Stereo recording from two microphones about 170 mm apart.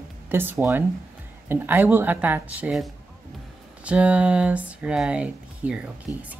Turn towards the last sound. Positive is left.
turn(degrees=-5)  # may be behind; listen again after turning